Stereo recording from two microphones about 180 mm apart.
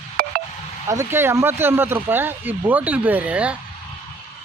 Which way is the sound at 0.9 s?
15° right (ahead or behind).